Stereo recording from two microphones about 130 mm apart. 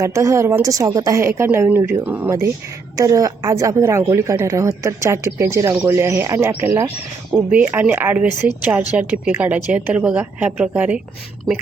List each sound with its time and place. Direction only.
0.0 s a woman's voice: 25° right (ahead or behind)
2.9 s a woman's voice: 25° right (ahead or behind); by 11.0 s 10° right (ahead or behind)